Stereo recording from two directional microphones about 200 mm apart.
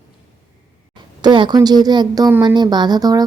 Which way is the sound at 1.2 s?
20° right (ahead or behind).